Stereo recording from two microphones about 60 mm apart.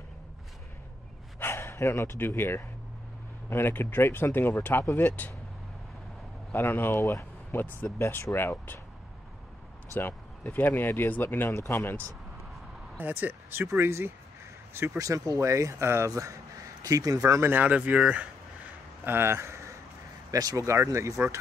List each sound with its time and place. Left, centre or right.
1.4 s speech: left
6.5 s speech: left
10.5 s speech: left
11.5 s speech: left
12.9 s speech: right
15.0 s speech: right
16.8 s speech: right
17.4 s speech: right
19.0 s speech: right
20.2 s speech: right